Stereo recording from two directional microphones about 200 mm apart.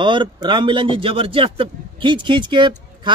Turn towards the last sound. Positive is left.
turn(degrees=-25)  # may be behind; listen again after turning